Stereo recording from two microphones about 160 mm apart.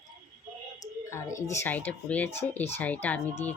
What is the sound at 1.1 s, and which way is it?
Speech, 15° left (ahead or behind).